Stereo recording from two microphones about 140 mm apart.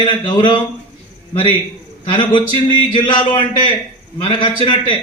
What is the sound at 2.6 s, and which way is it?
Speech, 35° left (ahead or behind).